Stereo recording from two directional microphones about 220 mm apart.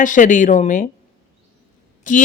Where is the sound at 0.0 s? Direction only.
35° left (ahead or behind).